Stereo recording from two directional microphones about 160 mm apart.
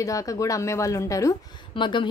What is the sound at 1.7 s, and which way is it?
Speech, 30° left (ahead or behind).